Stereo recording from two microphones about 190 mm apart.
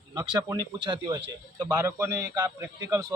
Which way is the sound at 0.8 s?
25° right (ahead or behind).